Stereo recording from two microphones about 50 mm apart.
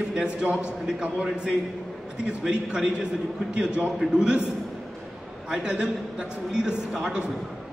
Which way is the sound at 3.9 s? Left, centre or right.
Centre.